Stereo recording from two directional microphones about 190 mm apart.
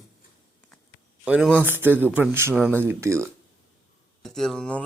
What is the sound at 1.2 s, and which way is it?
Speech, 5° right (ahead or behind).